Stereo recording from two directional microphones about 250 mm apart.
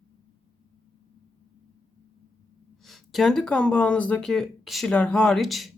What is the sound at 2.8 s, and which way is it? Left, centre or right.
Speech, centre.